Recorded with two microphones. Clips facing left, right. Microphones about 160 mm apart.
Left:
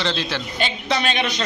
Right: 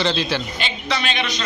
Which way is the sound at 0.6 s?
45° left (ahead or behind).